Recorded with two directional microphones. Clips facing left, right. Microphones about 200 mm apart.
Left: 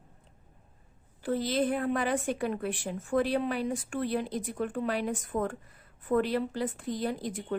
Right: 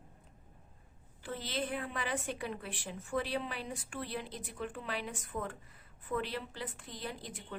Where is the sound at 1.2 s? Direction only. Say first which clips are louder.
Left 10 dB; 40° left (ahead or behind).